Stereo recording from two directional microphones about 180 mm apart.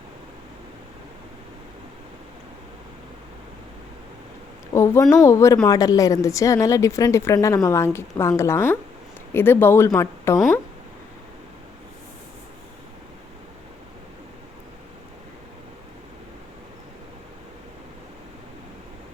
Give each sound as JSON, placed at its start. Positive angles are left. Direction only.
{"t": 4.7, "sound": "a woman's voice", "side_deg": 15}